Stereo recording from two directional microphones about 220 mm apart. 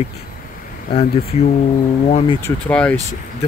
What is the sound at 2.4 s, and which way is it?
Speech, 5° left (ahead or behind).